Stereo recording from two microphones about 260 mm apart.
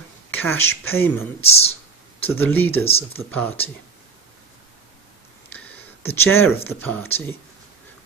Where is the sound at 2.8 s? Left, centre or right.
Left.